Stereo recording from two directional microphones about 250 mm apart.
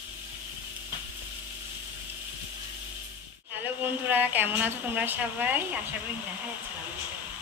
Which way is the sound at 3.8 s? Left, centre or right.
Centre.